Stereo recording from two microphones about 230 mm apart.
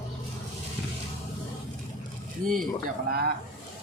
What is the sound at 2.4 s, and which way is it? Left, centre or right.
Speech, right.